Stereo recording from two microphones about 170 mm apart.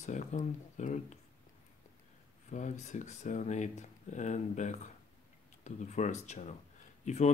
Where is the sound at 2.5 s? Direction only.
45° left (ahead or behind).